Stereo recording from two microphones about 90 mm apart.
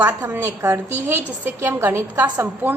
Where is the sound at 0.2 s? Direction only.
30° right (ahead or behind).